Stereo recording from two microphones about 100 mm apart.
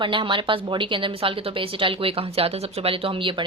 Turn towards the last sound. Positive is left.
turn(degrees=-65)  # may be behind; listen again after turning